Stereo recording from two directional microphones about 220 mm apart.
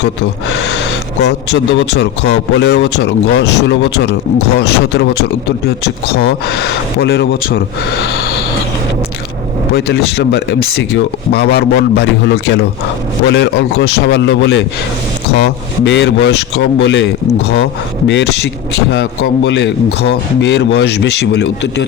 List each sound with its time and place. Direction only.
0.0 s a man's voice: 55° left (ahead or behind)
9.7 s a man's voice: 50° left (ahead or behind)
18.1 s a man's voice: 50° left (ahead or behind)